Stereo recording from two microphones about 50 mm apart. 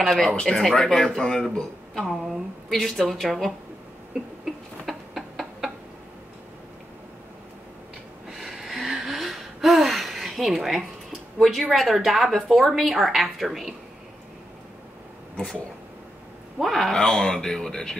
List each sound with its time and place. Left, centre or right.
0.0 s a woman's voice: centre
0.3 s speech: centre
0.6 s a woman's voice: centre
4.8 s a sound: centre
8.3 s gasp: centre
11.7 s a woman's voice: centre
16.5 s a woman's voice: centre
17.0 s speech: centre